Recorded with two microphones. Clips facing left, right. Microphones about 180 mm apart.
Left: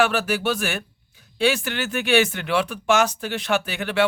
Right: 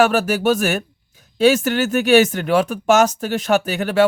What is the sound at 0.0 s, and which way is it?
Speech, 40° right (ahead or behind).